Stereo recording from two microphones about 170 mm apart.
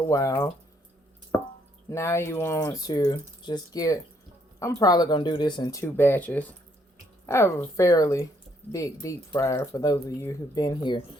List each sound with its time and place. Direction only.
0.1 s speech: 20° left (ahead or behind)
1.9 s speech: 15° left (ahead or behind)